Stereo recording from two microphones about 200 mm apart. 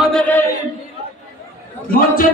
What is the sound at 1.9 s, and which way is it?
Speech, 45° left (ahead or behind).